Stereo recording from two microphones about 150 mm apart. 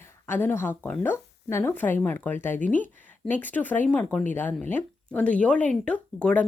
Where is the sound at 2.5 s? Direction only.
60° left (ahead or behind).